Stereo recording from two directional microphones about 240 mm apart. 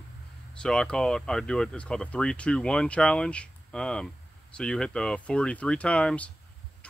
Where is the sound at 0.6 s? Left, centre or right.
Centre.